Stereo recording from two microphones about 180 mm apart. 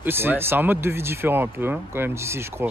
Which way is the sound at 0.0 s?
10° right (ahead or behind).